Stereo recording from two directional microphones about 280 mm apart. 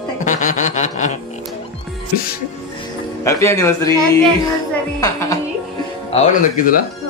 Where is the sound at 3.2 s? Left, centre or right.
Centre.